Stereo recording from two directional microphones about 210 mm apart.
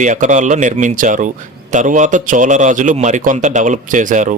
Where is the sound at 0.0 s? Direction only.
35° right (ahead or behind).